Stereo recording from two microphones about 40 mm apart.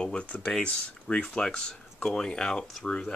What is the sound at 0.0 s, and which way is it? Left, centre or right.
Speech, left.